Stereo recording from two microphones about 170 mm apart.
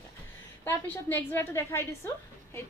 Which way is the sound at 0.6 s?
10° left (ahead or behind).